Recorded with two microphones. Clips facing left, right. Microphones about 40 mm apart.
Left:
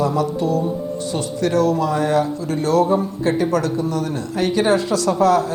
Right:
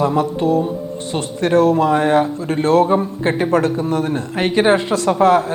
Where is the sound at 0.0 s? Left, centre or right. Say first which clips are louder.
Right 3 dB; right.